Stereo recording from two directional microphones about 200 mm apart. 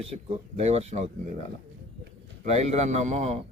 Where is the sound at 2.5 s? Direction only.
35° right (ahead or behind).